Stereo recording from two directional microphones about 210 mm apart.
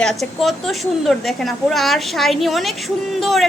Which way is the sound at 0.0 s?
Centre (ahead or behind).